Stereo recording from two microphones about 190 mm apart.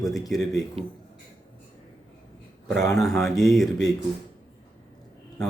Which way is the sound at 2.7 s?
Centre (ahead or behind).